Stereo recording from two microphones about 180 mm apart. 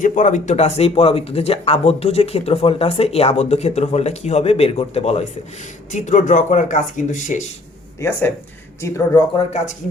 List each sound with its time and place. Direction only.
0.0 s speech: 45° left (ahead or behind)
8.0 s speech: 15° left (ahead or behind)